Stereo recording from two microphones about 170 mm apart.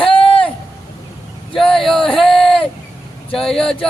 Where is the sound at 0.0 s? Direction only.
30° left (ahead or behind).